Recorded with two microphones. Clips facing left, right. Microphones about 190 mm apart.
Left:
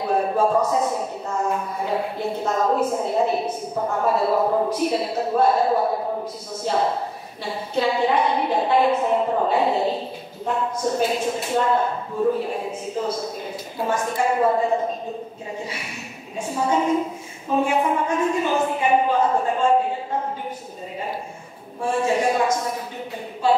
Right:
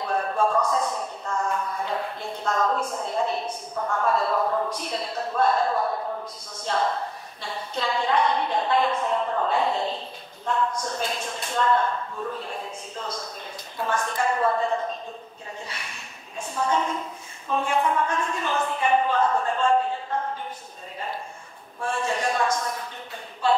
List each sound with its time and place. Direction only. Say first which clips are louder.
0.0 s a sound: left 4 dB; 15° left (ahead or behind)
0.8 s a man's voice: left 4 dB; 20° left (ahead or behind)
4.0 s a woman's voice: left 4 dB; 10° left (ahead or behind)
4.4 s a man's voice: left 5 dB; 20° left (ahead or behind)
4.6 s a woman's voice: left 8 dB; 5° left (ahead or behind)
11.0 s a woman's voice: left 8 dB; 10° left (ahead or behind)
16.3 s a woman's voice: left 4 dB; 10° left (ahead or behind)
21.8 s a woman's voice: left 6 dB; 10° left (ahead or behind)